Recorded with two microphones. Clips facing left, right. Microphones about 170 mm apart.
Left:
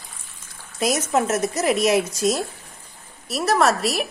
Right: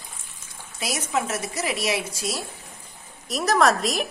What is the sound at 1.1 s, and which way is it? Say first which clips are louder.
Speech: left 6 dB; 45° left (ahead or behind).